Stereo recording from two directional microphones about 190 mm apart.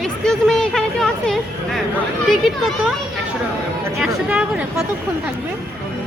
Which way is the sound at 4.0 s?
5° right (ahead or behind).